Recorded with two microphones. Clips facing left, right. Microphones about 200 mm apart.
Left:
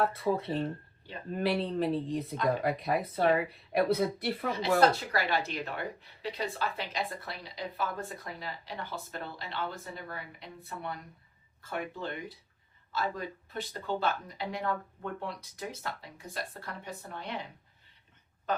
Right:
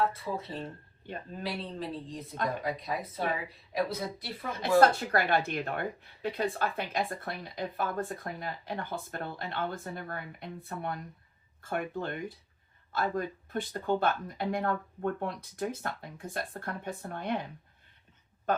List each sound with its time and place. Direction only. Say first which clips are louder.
0.0 s speech: left 3 dB; 60° left (ahead or behind)
4.5 s speech: right 3 dB; 50° right (ahead or behind)
18.5 s speech: right 3 dB; 50° right (ahead or behind)